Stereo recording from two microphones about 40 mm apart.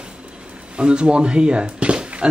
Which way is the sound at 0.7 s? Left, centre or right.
Right.